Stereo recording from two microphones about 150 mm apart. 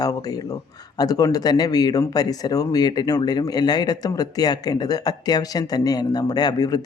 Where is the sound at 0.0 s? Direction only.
25° left (ahead or behind).